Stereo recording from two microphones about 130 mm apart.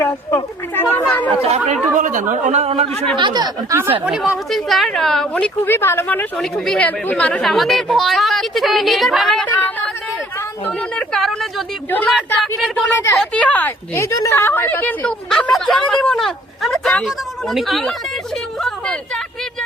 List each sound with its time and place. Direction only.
0.0 s speech: 20° left (ahead or behind)
1.4 s speech: 55° right (ahead or behind)
2.0 s speech: 90° right
2.3 s speech: 70° right (ahead or behind); by 2.9 s 50° right (ahead or behind)
3.2 s speech: 35° right (ahead or behind)
4.0 s a woman's voice: 5° right (ahead or behind); by 6.2 s 15° left (ahead or behind)
6.3 s a woman's voice: 5° left (ahead or behind)
9.5 s a woman's voice: 15° left (ahead or behind)